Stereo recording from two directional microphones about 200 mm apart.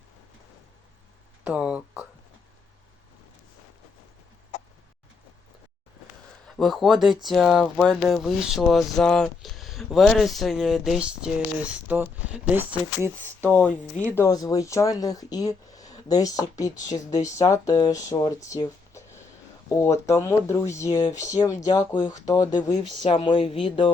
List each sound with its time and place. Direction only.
1.5 s a sound: 5° right (ahead or behind)
6.6 s speech: centre (ahead or behind)
13.4 s speech: 5° left (ahead or behind)
14.2 s speech: 15° left (ahead or behind)
21.1 s speech: 35° left (ahead or behind)
21.6 s speech: 20° left (ahead or behind)